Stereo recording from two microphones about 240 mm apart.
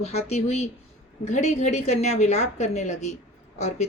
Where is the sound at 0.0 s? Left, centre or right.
Left.